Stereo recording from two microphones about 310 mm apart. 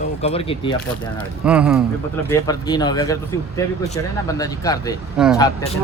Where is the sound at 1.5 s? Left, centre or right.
Centre.